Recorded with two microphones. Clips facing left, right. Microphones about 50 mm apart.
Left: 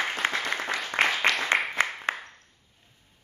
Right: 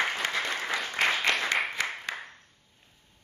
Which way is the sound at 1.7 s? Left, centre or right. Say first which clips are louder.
Left 5 dB; left.